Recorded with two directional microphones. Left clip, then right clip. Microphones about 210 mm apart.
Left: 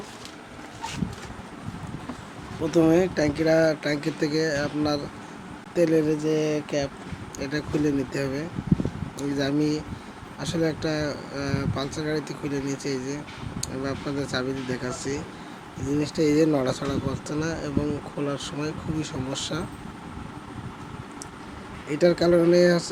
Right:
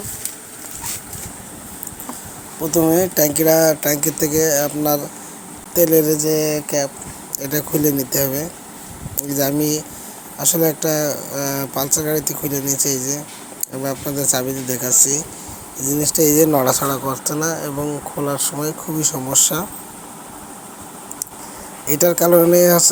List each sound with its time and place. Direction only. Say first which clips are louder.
2.6 s speech: right 4 dB; centre (ahead or behind)
3.2 s speech: right 7 dB; 20° right (ahead or behind)
21.8 s speech: right 6 dB; 20° right (ahead or behind)